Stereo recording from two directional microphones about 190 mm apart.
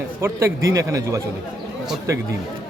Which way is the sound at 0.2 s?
15° right (ahead or behind).